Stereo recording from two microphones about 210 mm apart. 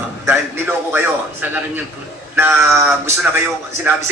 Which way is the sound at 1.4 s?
10° right (ahead or behind).